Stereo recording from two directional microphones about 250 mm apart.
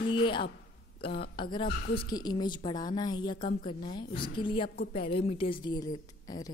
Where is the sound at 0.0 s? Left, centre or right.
Centre.